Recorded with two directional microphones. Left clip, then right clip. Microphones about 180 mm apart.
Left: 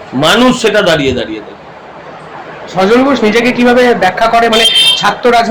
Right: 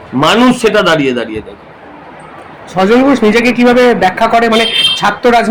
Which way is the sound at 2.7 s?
45° right (ahead or behind).